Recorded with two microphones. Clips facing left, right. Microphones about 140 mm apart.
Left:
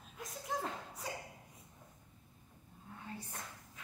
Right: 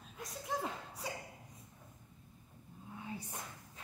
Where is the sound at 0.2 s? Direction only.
Centre (ahead or behind).